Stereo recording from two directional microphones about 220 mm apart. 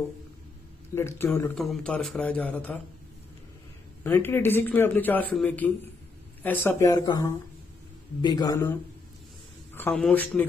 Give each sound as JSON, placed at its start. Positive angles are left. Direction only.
{"t": 0.9, "sound": "a man's voice", "side_deg": 10}
{"t": 4.0, "sound": "a man's voice", "side_deg": 10}
{"t": 9.8, "sound": "a man's voice", "side_deg": 5}